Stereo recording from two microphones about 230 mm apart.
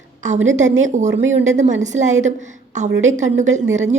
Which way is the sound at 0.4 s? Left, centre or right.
Right.